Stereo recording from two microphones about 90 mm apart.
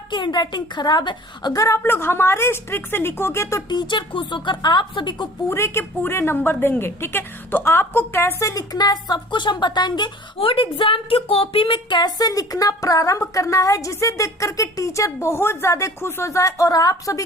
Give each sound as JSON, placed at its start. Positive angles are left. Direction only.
{"t": 0.1, "sound": "speech", "side_deg": 55}
{"t": 1.5, "sound": "speech", "side_deg": 35}
{"t": 1.8, "sound": "a woman's voice", "side_deg": 25}
{"t": 3.7, "sound": "speech", "side_deg": 60}
{"t": 5.5, "sound": "a woman's voice", "side_deg": 30}
{"t": 10.3, "sound": "speech", "side_deg": 90}